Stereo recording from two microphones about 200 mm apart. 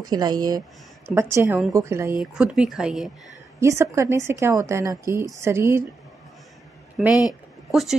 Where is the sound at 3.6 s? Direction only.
15° right (ahead or behind).